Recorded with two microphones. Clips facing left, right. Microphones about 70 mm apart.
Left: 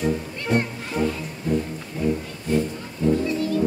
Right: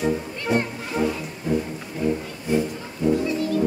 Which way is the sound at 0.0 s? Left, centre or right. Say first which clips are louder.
Right 1 dB; centre.